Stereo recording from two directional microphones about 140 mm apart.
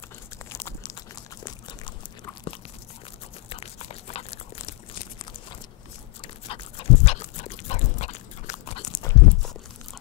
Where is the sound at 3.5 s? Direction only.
45° left (ahead or behind).